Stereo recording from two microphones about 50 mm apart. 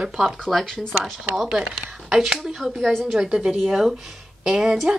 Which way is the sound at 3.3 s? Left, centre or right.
Centre.